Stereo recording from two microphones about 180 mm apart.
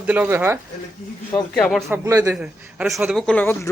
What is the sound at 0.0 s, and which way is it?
Speech, 10° right (ahead or behind).